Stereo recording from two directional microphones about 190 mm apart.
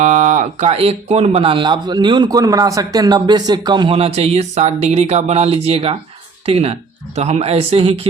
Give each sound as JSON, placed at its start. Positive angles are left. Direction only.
{"t": 0.0, "sound": "speech", "side_deg": -40}